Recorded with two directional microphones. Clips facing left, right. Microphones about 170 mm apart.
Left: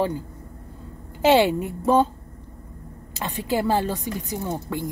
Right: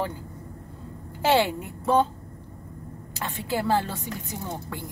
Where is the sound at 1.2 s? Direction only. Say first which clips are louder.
Left 5 dB; 15° left (ahead or behind).